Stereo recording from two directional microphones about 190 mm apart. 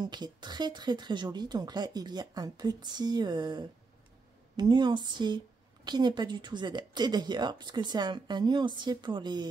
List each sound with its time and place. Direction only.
0.0 s speech: 20° right (ahead or behind)